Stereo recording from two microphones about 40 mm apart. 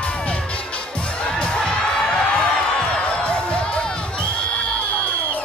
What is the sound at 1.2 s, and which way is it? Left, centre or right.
Crowd, left.